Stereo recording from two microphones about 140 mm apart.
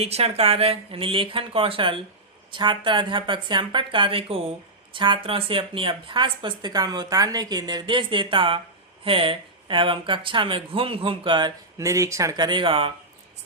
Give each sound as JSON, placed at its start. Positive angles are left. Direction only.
{"t": 0.0, "sound": "speech", "side_deg": -45}